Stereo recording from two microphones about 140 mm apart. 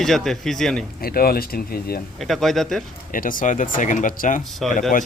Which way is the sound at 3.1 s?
80° left.